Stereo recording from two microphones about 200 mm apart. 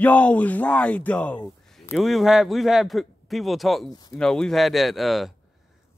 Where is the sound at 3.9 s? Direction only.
20° left (ahead or behind).